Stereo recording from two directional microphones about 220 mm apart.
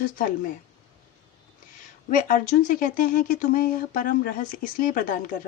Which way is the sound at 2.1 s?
35° left (ahead or behind).